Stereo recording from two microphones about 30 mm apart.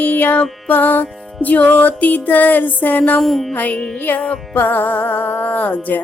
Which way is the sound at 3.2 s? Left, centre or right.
Centre.